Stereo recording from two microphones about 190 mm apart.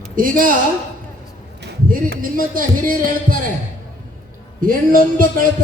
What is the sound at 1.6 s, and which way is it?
Speech, 55° right (ahead or behind).